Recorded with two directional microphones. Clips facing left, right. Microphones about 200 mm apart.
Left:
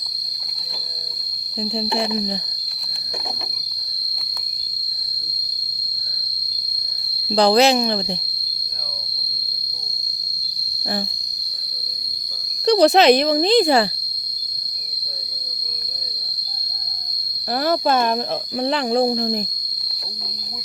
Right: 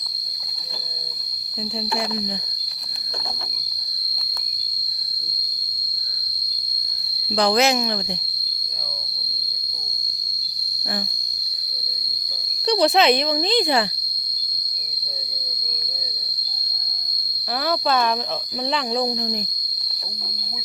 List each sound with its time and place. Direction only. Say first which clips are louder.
1.9 s cricket: left 3 dB; 25° left (ahead or behind)
7.3 s speech: left 4 dB; 35° left (ahead or behind)
12.6 s speech: left 5 dB; 45° left (ahead or behind)
17.6 s speech: left 3 dB; 45° left (ahead or behind)